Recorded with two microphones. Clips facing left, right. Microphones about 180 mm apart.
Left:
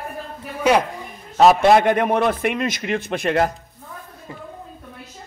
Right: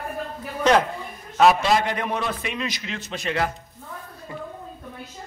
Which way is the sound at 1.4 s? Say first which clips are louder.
Left 5 dB; 50° left (ahead or behind).